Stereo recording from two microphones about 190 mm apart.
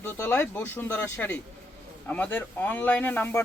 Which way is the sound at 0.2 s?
10° left (ahead or behind).